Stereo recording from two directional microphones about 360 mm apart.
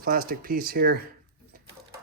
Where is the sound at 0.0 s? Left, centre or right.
Right.